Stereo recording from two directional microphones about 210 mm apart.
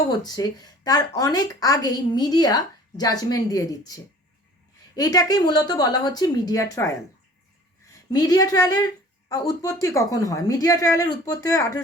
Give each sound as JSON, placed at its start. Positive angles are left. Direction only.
{"t": 0.1, "sound": "a woman's voice", "side_deg": 20}